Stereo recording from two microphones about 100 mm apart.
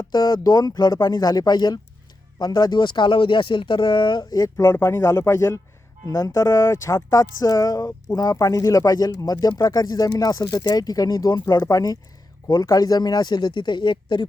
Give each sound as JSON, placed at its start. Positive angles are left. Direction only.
{"t": 0.0, "sound": "speech", "side_deg": 45}